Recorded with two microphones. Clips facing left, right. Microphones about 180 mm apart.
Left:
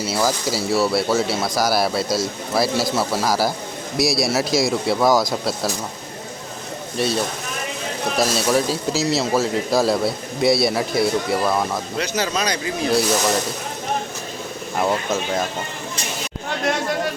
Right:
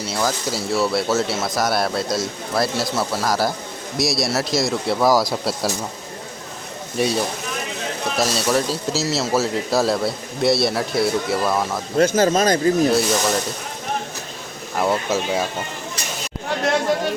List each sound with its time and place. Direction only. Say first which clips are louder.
0.0 s a man's voice: left 2 dB; 5° left (ahead or behind)
8.2 s a man's voice: left 1 dB; centre (ahead or behind)
11.9 s speech: right 9 dB; 45° right (ahead or behind)
12.9 s a man's voice: even; centre (ahead or behind)
14.8 s speech: right 1 dB; 5° right (ahead or behind)